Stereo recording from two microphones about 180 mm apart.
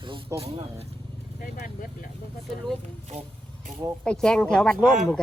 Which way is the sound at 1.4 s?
50° left (ahead or behind).